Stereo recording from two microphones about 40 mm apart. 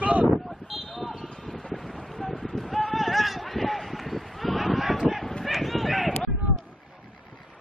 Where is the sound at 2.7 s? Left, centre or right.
Centre.